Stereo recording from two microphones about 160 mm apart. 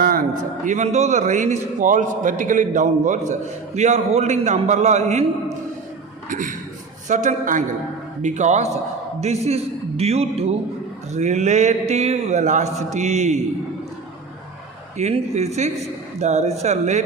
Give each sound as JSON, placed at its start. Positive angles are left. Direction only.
{"t": 0.0, "sound": "a man's voice", "side_deg": -60}
{"t": 6.2, "sound": "a man's voice", "side_deg": -55}
{"t": 14.9, "sound": "a man's voice", "side_deg": -45}